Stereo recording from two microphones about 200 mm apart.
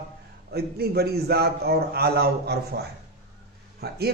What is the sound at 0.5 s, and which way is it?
A man's voice, 50° right (ahead or behind).